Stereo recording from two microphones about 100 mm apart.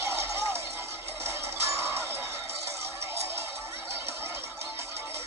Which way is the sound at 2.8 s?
25° right (ahead or behind).